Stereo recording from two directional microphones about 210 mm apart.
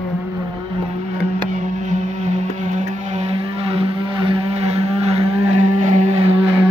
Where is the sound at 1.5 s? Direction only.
35° right (ahead or behind).